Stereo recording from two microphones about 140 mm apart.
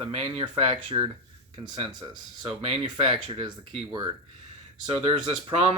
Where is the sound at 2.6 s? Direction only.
45° right (ahead or behind).